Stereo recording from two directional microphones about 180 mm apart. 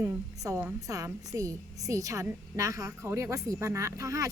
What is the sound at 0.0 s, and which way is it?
A woman's voice, 15° right (ahead or behind).